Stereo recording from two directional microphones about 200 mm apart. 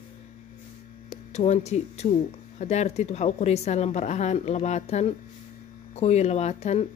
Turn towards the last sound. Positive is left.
turn(degrees=35)  # may be behind; listen again after turning